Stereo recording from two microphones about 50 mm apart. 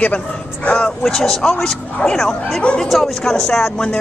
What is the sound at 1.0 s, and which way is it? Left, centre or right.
Speech, centre.